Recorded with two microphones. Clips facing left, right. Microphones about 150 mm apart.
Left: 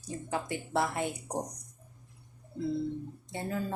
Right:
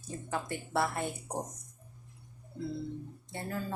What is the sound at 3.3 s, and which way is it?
Speech, 20° left (ahead or behind).